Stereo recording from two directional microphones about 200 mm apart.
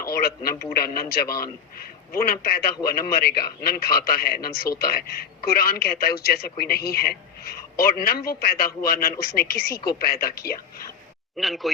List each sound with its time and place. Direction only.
0.0 s a man's voice: 50° left (ahead or behind)
11.3 s speech: centre (ahead or behind)